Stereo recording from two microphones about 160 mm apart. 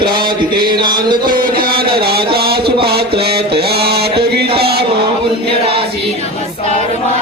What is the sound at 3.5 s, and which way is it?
Mantra, 85° right.